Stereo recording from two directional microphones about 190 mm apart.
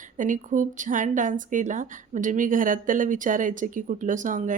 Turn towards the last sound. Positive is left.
turn(degrees=-45)  # may be behind; listen again after turning